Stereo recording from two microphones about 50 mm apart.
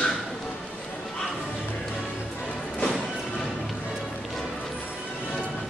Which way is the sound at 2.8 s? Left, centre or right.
Centre.